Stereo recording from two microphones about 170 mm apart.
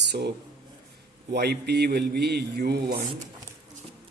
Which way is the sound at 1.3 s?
75° right (ahead or behind).